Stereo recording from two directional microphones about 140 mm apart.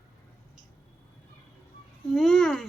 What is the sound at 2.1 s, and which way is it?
Speech, 5° left (ahead or behind).